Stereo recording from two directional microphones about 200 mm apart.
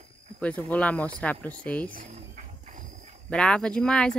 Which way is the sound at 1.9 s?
40° right (ahead or behind).